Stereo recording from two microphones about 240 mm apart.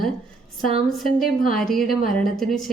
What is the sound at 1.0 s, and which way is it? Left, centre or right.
Speech, left.